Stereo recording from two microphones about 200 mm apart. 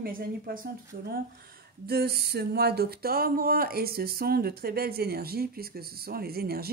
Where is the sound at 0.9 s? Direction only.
40° right (ahead or behind).